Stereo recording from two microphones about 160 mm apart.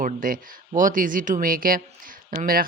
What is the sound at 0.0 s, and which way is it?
Speech, 60° right (ahead or behind).